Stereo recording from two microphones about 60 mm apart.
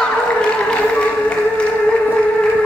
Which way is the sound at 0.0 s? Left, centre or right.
Centre.